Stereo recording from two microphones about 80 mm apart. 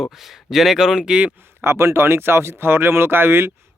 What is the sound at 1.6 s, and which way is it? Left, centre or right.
Speech, right.